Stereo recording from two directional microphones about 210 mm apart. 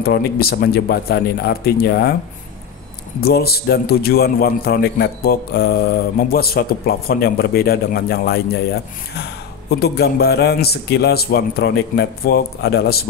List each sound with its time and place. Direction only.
0.0 s a man's voice: 45° left (ahead or behind)
3.2 s a man's voice: 50° left (ahead or behind)
9.7 s a man's voice: 50° left (ahead or behind)